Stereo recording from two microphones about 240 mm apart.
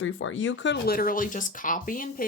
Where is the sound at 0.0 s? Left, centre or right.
Left.